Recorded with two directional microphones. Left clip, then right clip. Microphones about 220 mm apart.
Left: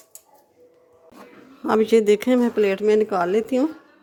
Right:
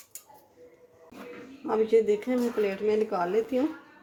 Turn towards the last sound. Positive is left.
turn(degrees=55)  # may be behind; listen again after turning